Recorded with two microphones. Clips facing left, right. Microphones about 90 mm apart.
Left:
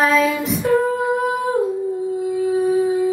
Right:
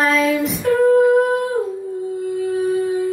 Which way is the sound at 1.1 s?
Centre (ahead or behind).